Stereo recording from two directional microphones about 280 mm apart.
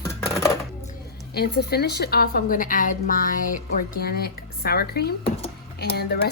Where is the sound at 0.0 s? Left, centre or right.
Centre.